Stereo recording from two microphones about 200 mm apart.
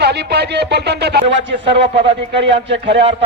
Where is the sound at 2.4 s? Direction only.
60° right (ahead or behind).